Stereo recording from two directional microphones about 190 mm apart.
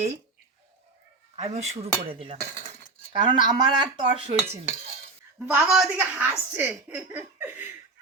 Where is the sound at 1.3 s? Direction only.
35° right (ahead or behind).